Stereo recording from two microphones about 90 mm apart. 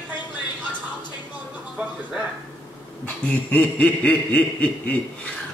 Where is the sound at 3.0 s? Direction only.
15° left (ahead or behind).